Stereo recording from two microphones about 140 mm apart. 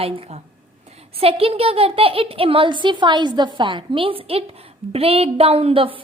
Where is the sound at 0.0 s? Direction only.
45° right (ahead or behind).